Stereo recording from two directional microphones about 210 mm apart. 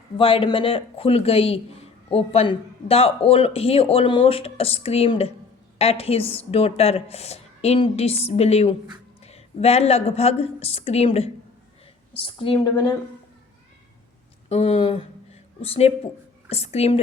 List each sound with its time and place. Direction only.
0.2 s speech: 25° left (ahead or behind)
14.5 s speech: 30° left (ahead or behind)